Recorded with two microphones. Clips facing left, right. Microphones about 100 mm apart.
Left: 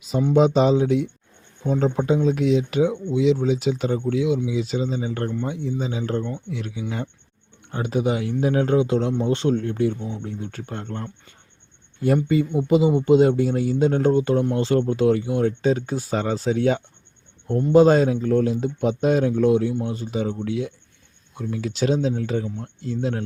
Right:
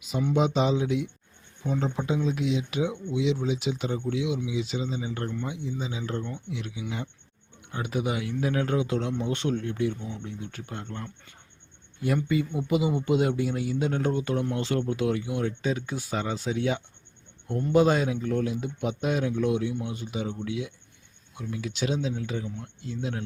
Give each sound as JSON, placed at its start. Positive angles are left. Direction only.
{"t": 0.0, "sound": "speech", "side_deg": 35}
{"t": 7.7, "sound": "speech", "side_deg": 30}
{"t": 17.6, "sound": "speech", "side_deg": 30}